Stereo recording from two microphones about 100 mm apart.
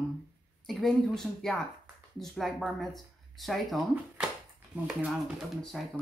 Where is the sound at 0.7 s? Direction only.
5° left (ahead or behind).